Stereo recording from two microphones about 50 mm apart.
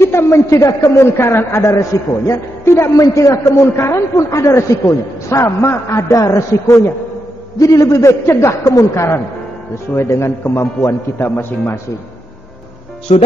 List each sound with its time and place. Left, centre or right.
0.0 s a woman's voice: left
1.1 s a woman's voice: left
8.3 s a woman's voice: left
11.1 s speech: left